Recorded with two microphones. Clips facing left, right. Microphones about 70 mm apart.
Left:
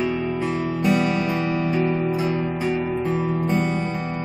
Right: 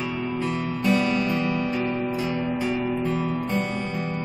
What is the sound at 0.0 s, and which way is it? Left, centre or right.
Music, centre.